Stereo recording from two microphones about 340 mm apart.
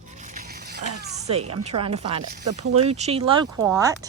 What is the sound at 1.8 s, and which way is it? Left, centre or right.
Speech, centre.